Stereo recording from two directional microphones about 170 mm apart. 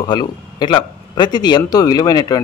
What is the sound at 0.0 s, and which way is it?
A man's voice, 25° left (ahead or behind).